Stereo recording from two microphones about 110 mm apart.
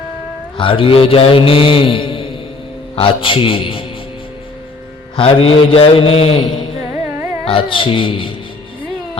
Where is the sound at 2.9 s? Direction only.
55° left (ahead or behind).